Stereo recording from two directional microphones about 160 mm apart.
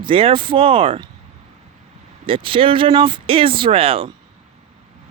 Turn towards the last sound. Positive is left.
turn(degrees=-35)  # may be behind; listen again after turning